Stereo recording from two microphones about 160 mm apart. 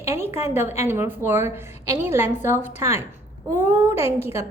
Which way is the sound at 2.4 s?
50° left (ahead or behind).